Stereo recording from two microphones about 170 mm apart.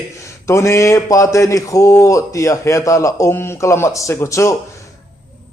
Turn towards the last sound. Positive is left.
turn(degrees=15)  # may be behind; listen again after turning